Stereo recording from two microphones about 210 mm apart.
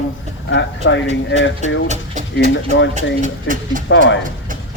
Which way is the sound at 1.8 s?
35° right (ahead or behind).